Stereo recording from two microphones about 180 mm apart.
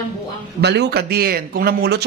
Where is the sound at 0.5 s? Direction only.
65° right (ahead or behind).